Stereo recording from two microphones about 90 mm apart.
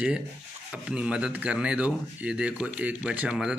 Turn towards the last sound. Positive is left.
turn(degrees=-10)  # may be behind; listen again after turning